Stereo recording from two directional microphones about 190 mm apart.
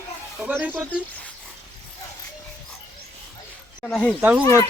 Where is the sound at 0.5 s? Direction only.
5° right (ahead or behind).